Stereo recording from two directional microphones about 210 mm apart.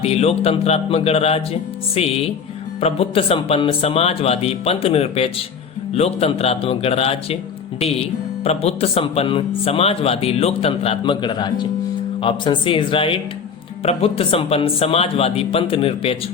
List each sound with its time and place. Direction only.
0.0 s speech: 30° left (ahead or behind)